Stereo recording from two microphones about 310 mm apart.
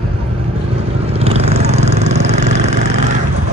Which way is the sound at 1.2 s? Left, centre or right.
Centre.